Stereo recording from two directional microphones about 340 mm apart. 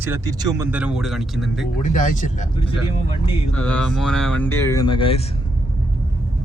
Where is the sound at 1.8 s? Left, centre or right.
Left.